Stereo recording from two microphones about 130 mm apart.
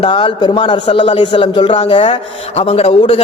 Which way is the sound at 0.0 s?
40° left (ahead or behind).